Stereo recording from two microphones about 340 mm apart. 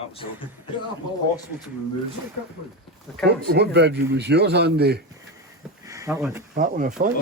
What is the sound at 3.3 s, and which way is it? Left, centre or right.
A man's voice, right.